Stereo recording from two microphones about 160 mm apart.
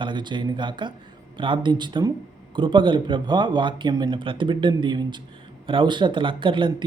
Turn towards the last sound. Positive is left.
turn(degrees=-30)  # may be behind; listen again after turning